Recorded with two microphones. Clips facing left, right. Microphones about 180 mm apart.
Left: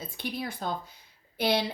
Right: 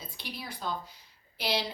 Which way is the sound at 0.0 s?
55° left (ahead or behind).